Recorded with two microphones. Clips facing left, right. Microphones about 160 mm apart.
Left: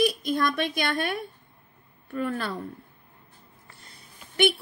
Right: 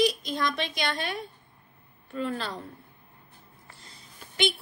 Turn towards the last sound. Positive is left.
turn(degrees=60)  # may be behind; listen again after turning